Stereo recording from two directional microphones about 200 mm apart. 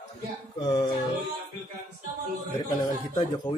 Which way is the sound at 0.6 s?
20° left (ahead or behind).